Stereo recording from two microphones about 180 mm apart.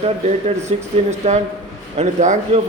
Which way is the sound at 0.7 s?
35° right (ahead or behind).